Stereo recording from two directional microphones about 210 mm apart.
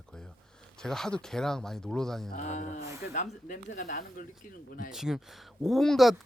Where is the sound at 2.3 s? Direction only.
35° left (ahead or behind).